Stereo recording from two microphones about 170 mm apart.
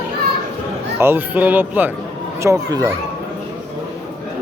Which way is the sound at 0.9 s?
10° right (ahead or behind).